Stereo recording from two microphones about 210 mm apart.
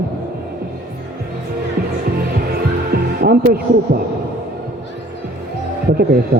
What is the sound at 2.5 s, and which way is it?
Heart sounds, 45° right (ahead or behind).